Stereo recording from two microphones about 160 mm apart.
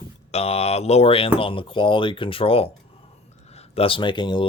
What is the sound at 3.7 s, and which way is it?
Speech, 35° left (ahead or behind).